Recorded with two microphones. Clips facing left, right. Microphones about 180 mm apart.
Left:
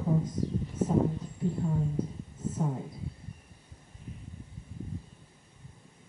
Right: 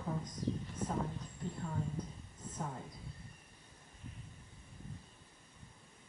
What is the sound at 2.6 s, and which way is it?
Speech, 20° left (ahead or behind).